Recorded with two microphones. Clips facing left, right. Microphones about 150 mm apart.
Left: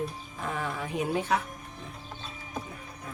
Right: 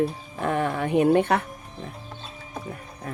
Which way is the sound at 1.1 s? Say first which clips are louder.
Right 7 dB; 60° right (ahead or behind).